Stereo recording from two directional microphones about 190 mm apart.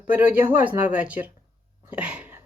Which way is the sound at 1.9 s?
5° right (ahead or behind).